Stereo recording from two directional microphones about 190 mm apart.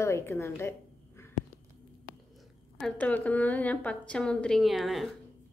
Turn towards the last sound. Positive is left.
turn(degrees=0)  # may be behind; listen again after turning